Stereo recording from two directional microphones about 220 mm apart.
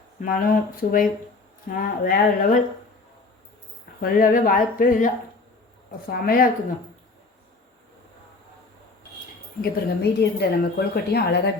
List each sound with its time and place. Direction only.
0.2 s speech: 40° left (ahead or behind)
4.0 s speech: 40° left (ahead or behind)
9.6 s a woman's voice: 50° left (ahead or behind)